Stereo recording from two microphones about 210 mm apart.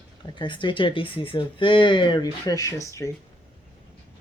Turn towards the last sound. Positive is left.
turn(degrees=15)  # may be behind; listen again after turning